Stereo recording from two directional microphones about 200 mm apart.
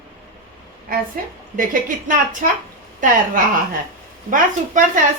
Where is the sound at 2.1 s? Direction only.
40° right (ahead or behind).